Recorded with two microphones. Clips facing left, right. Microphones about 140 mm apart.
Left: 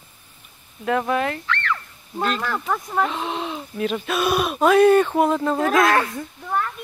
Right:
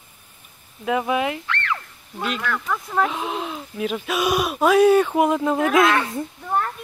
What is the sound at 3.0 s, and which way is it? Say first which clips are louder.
Speech: right 2 dB; 5° right (ahead or behind).